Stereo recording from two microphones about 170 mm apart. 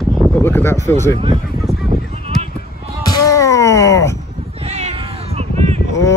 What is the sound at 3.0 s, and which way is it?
Wail, 20° left (ahead or behind).